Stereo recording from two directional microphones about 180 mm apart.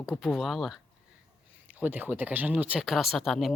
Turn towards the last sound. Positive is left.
turn(degrees=0)  # may be behind; listen again after turning